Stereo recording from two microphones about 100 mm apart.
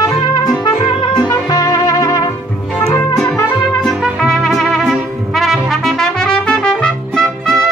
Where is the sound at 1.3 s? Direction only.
35° left (ahead or behind).